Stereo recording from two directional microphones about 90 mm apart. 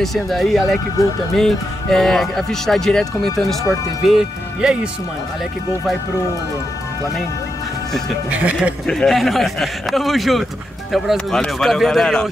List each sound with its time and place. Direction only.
0.0 s speech: centre (ahead or behind)
8.3 s speech: 15° right (ahead or behind)
8.8 s speech: 5° left (ahead or behind)